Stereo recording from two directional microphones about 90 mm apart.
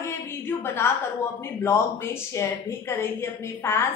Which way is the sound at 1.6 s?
30° left (ahead or behind).